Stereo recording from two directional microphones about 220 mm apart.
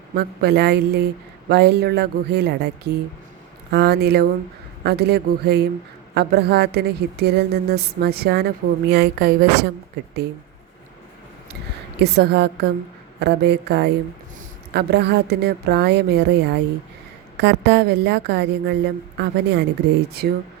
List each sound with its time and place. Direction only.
0.2 s a woman's voice: 50° right (ahead or behind)
11.9 s a woman's voice: 50° right (ahead or behind)